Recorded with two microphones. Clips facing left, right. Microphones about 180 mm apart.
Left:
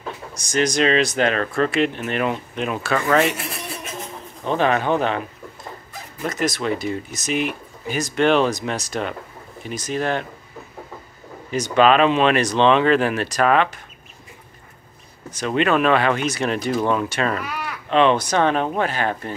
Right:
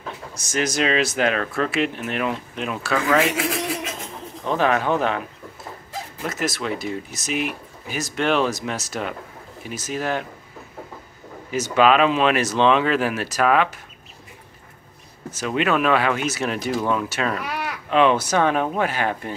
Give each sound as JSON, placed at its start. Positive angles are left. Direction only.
{"t": 0.5, "sound": "speech", "side_deg": -5}
{"t": 3.3, "sound": "a sound", "side_deg": -90}
{"t": 4.5, "sound": "speech", "side_deg": 0}
{"t": 6.2, "sound": "speech", "side_deg": -5}
{"t": 11.5, "sound": "speech", "side_deg": -5}
{"t": 15.3, "sound": "speech", "side_deg": -5}